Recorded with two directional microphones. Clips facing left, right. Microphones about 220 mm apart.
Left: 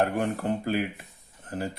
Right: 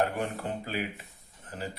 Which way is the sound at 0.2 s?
50° left (ahead or behind).